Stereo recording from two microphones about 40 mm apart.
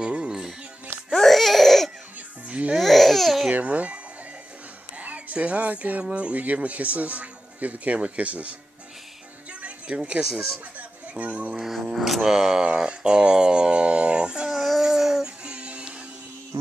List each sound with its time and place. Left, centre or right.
0.0 s music: right
1.1 s crying: centre
2.4 s music: right
2.8 s babbling: centre
3.6 s music: right
4.9 s speech: right
9.5 s music: right
10.3 s speech: right
11.8 s speech: centre
12.7 s speech: right
14.5 s a sound: centre
14.8 s a sound: centre
15.2 s music: right